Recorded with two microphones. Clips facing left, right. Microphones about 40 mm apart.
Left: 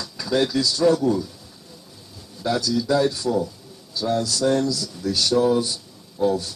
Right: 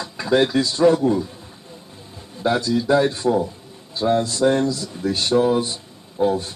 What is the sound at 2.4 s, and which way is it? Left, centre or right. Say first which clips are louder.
Speech: right 3 dB; right.